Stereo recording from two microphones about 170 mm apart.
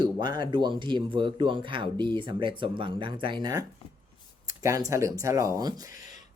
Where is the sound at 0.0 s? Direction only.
25° right (ahead or behind).